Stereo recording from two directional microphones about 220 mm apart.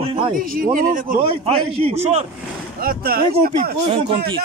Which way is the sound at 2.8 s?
40° right (ahead or behind).